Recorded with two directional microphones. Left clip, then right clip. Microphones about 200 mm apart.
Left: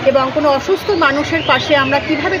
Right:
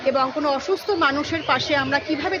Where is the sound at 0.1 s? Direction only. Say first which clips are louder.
Left 8 dB; 10° right (ahead or behind).